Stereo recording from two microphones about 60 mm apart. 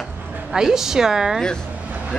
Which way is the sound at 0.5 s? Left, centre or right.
Centre.